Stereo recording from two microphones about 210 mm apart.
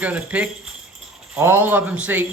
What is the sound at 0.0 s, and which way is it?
A man's voice, 5° right (ahead or behind).